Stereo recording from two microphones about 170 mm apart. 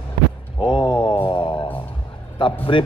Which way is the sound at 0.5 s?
30° left (ahead or behind).